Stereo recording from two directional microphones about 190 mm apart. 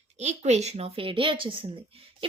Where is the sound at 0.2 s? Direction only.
35° right (ahead or behind).